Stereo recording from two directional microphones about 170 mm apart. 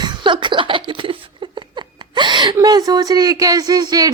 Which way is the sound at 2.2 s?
25° right (ahead or behind).